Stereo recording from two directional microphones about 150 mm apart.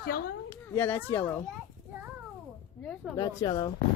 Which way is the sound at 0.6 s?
15° left (ahead or behind).